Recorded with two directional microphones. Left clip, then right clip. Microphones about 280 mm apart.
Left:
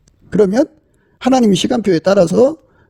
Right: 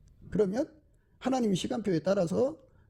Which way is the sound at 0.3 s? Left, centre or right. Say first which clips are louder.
Left 16 dB; left.